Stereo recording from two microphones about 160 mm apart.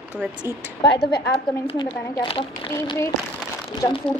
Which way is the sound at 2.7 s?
20° left (ahead or behind).